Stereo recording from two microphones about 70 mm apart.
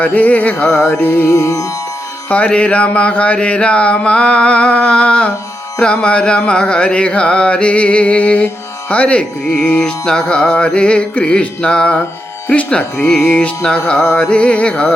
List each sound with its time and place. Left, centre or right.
0.0 s music: left
1.3 s music: left
2.3 s speech: centre